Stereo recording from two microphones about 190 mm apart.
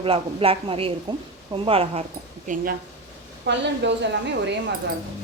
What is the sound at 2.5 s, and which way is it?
Speech, 45° right (ahead or behind).